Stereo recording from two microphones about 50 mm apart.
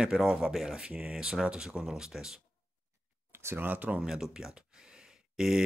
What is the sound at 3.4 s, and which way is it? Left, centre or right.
Speech, right.